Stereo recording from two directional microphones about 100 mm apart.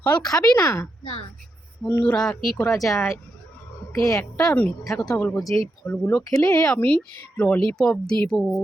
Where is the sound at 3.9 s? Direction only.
30° left (ahead or behind).